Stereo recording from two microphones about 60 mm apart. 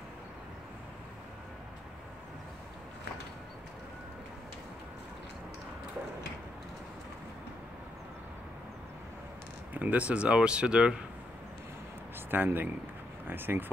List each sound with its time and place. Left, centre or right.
9.8 s speech: right
12.3 s speech: right